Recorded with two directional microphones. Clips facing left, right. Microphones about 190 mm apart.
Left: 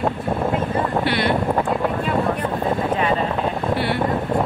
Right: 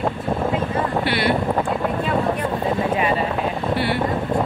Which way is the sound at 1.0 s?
5° right (ahead or behind).